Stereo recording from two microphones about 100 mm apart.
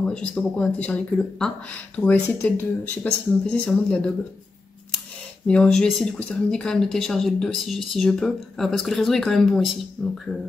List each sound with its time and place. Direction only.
0.0 s speech: 10° left (ahead or behind)
5.5 s speech: 10° left (ahead or behind)